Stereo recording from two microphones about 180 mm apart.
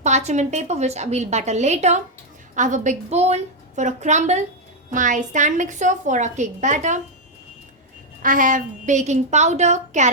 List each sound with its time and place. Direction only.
0.0 s a woman's voice: 40° right (ahead or behind)
8.2 s a woman's voice: 50° right (ahead or behind)